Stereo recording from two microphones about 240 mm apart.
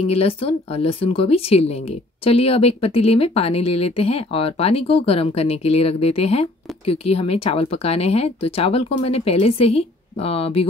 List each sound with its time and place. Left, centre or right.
0.1 s speech: left